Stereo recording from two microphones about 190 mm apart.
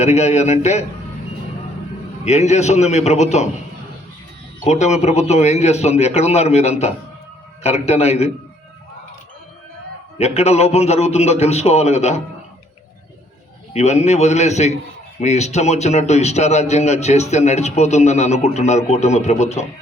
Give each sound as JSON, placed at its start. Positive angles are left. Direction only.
{"t": 0.0, "sound": "a man's voice", "side_deg": 35}
{"t": 2.2, "sound": "a man's voice", "side_deg": 35}
{"t": 4.6, "sound": "a man's voice", "side_deg": 35}
{"t": 10.2, "sound": "a man's voice", "side_deg": 35}
{"t": 13.7, "sound": "a man's voice", "side_deg": 35}